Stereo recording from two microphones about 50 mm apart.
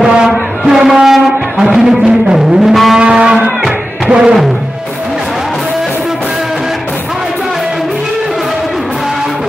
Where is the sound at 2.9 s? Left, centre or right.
Centre.